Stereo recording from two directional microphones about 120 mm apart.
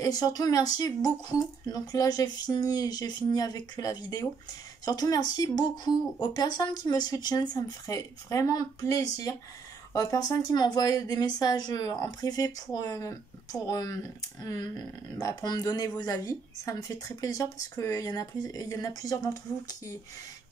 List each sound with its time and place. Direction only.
0.0 s speech: 35° left (ahead or behind)